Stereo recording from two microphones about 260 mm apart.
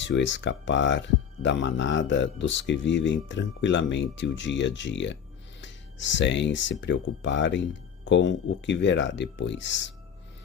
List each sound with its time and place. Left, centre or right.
0.0 s speech: left